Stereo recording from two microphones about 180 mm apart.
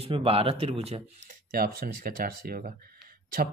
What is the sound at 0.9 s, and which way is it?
Speech, 50° right (ahead or behind).